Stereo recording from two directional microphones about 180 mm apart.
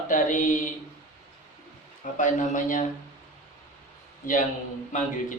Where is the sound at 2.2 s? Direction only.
45° left (ahead or behind).